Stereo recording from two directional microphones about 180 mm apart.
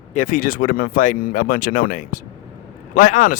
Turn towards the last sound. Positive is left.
turn(degrees=45)  # may be behind; listen again after turning